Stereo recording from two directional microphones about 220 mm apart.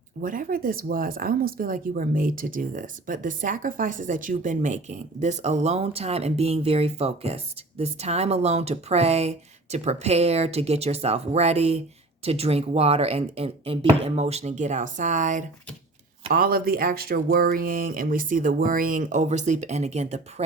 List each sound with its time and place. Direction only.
0.2 s speech: 40° right (ahead or behind)